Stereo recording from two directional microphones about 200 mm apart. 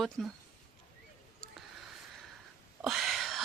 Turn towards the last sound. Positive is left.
turn(degrees=0)  # may be behind; listen again after turning